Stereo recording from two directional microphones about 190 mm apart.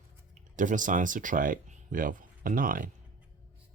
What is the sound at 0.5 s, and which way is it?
Speech, 40° right (ahead or behind).